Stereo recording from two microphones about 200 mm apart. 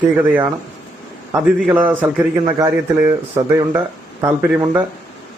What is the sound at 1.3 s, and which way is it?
Speech, 10° right (ahead or behind).